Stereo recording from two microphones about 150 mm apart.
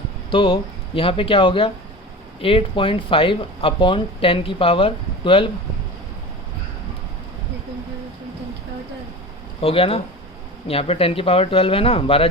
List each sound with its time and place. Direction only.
0.3 s speech: 35° left (ahead or behind)
9.6 s speech: 40° left (ahead or behind)